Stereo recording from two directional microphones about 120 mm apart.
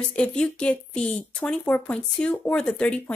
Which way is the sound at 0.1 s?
10° left (ahead or behind).